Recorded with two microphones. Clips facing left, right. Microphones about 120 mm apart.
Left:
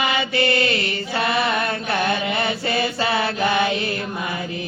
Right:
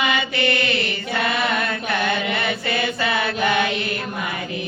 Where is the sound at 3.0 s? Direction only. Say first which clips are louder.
Left 2 dB; 30° left (ahead or behind).